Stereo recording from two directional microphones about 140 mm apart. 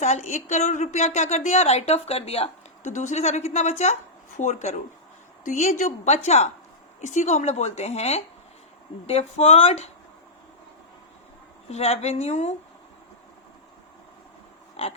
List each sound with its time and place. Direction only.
0.0 s a woman's voice: 55° left (ahead or behind)
11.7 s a woman's voice: 50° left (ahead or behind)
14.8 s a woman's voice: 45° left (ahead or behind)